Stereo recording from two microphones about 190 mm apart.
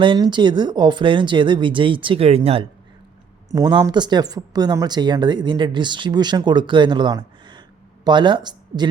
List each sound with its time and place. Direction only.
0.0 s speech: 25° right (ahead or behind)
3.5 s speech: 20° right (ahead or behind)